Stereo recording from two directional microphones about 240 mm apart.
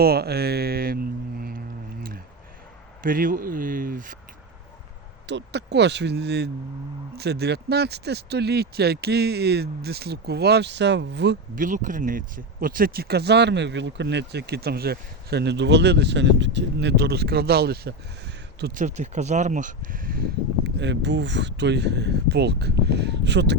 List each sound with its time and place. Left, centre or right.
0.0 s speech: right
3.0 s speech: right
5.2 s speech: right
11.6 s speech: right
18.6 s speech: right